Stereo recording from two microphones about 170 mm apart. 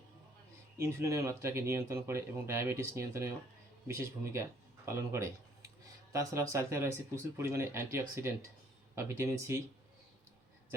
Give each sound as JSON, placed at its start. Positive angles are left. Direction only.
{"t": 0.8, "sound": "speech", "side_deg": -15}